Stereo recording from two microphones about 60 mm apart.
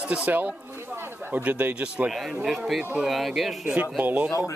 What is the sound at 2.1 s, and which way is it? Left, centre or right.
Speech, centre.